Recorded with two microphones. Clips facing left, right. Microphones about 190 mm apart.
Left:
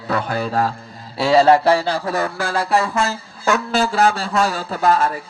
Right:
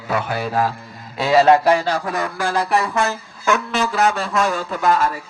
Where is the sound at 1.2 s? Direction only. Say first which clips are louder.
Left 1 dB; 30° left (ahead or behind).